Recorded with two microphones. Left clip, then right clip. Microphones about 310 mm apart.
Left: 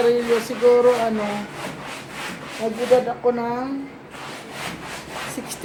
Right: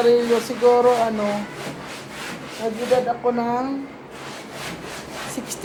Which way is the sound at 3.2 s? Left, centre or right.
Centre.